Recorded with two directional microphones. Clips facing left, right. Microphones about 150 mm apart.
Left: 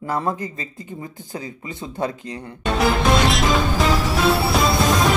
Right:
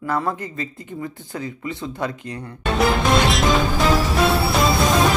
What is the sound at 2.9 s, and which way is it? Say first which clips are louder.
Music: left 1 dB; centre (ahead or behind).